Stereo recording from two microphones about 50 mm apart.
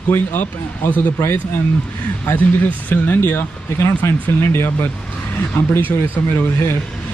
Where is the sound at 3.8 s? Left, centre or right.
Left.